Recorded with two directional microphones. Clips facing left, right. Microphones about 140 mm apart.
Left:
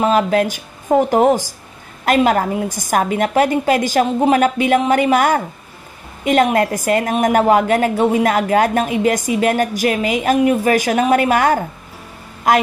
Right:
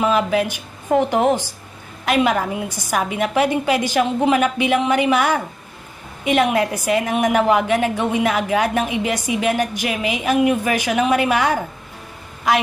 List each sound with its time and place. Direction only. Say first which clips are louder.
0.0 s a woman's voice: left 3 dB; 45° left (ahead or behind)